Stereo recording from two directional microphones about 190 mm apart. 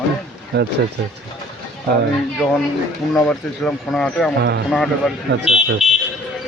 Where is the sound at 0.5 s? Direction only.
60° right (ahead or behind).